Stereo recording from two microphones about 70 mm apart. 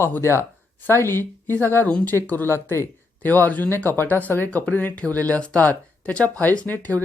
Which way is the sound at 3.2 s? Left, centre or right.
Left.